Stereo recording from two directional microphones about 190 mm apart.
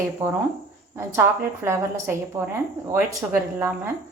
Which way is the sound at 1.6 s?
15° right (ahead or behind).